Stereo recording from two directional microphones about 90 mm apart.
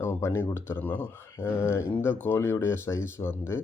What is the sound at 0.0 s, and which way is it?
Speech, 25° left (ahead or behind).